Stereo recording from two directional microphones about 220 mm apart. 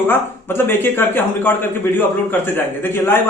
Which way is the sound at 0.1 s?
10° left (ahead or behind).